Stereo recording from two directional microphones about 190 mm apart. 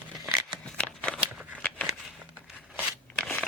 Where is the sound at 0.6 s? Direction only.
5° left (ahead or behind).